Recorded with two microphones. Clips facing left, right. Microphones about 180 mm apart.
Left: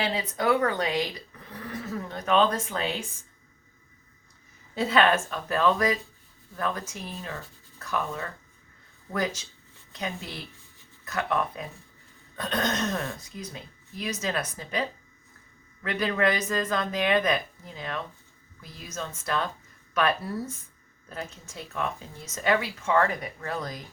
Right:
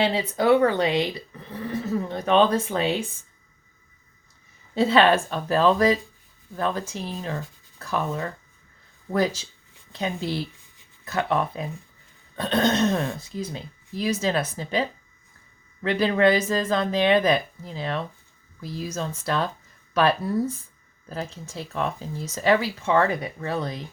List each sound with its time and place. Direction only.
0.0 s speech: 30° right (ahead or behind)
4.7 s speech: 30° right (ahead or behind)